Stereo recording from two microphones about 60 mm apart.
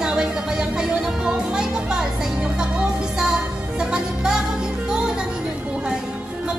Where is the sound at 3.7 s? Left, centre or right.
Centre.